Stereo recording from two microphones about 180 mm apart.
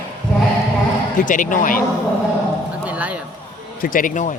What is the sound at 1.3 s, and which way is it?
Speech, 45° left (ahead or behind).